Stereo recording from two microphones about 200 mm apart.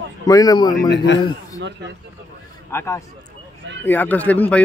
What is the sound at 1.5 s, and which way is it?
Speech, 60° right (ahead or behind).